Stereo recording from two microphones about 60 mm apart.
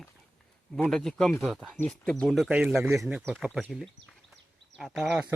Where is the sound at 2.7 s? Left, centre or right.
Centre.